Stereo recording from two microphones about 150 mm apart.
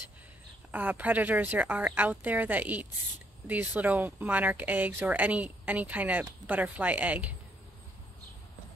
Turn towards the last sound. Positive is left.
turn(degrees=-10)  # may be behind; listen again after turning